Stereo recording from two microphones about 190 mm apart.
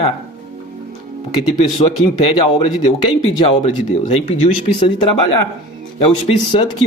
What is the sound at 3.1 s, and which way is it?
Speech, 30° left (ahead or behind).